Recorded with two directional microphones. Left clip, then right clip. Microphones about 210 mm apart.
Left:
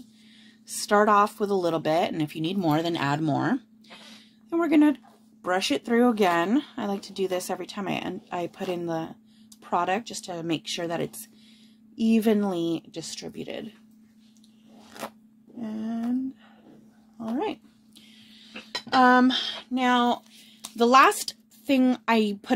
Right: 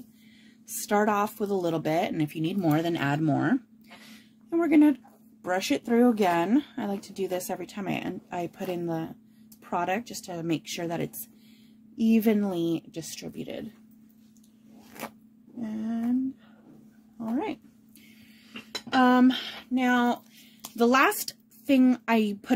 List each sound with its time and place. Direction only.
0.7 s speech: 15° right (ahead or behind)
15.6 s speech: 20° right (ahead or behind)
17.2 s speech: 15° right (ahead or behind)
18.9 s speech: 15° right (ahead or behind)